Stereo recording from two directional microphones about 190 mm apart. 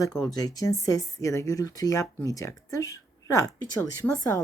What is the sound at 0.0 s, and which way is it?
A woman's voice, 20° left (ahead or behind).